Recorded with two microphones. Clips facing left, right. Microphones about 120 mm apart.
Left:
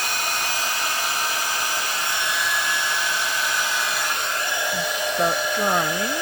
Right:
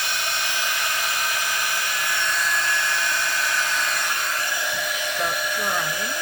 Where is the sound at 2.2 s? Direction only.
5° left (ahead or behind).